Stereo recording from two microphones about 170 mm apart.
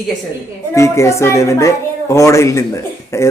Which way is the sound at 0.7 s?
15° left (ahead or behind).